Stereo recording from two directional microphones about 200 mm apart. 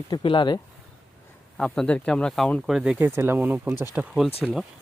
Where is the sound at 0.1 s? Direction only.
25° left (ahead or behind).